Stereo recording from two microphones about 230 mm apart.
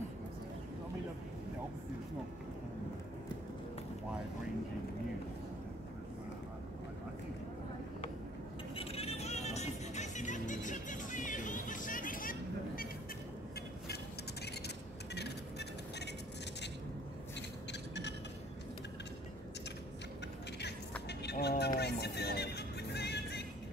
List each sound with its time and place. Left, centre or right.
8.7 s music: left
21.1 s music: left